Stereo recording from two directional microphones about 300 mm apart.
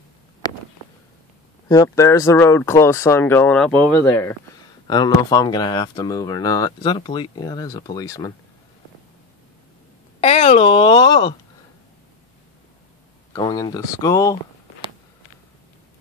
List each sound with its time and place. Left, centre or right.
0.4 s a sound: centre
1.7 s speech: centre
10.2 s speech: centre
13.3 s speech: centre